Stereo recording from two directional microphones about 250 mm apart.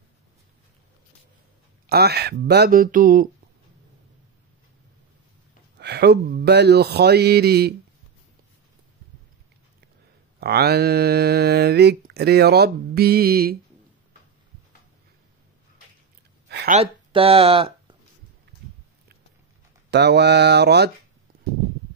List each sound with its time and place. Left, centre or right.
1.9 s speech: right
5.8 s speech: right
10.4 s speech: right
16.4 s a sound: right
16.7 s speech: right
19.9 s speech: right